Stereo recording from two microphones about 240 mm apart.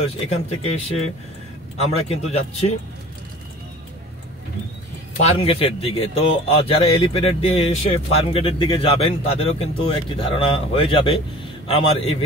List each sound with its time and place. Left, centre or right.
0.0 s speech: left
5.2 s speech: left